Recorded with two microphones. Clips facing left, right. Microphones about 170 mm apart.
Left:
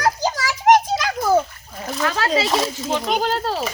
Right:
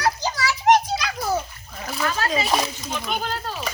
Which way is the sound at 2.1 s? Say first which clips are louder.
Left 3 dB; 90° left.